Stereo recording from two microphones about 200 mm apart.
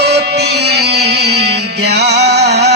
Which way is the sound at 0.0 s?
55° right (ahead or behind).